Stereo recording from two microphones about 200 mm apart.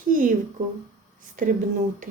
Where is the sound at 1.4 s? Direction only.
40° right (ahead or behind).